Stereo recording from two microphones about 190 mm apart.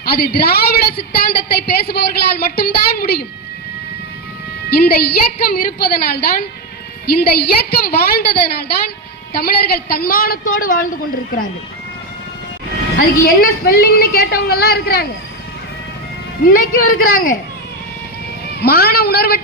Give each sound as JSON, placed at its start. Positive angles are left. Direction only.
{"t": 0.0, "sound": "a woman's voice", "side_deg": 55}
{"t": 4.7, "sound": "a woman's voice", "side_deg": 55}
{"t": 9.3, "sound": "a woman's voice", "side_deg": 55}
{"t": 13.2, "sound": "a woman's voice", "side_deg": 50}
{"t": 16.6, "sound": "a woman's voice", "side_deg": 50}
{"t": 18.6, "sound": "a woman's voice", "side_deg": 55}